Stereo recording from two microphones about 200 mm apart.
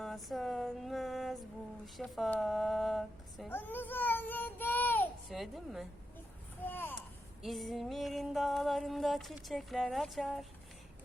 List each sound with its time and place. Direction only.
0.0 s a sound: centre (ahead or behind)
2.0 s speech: centre (ahead or behind)
6.6 s a child's voice: 10° left (ahead or behind)
7.4 s music: centre (ahead or behind)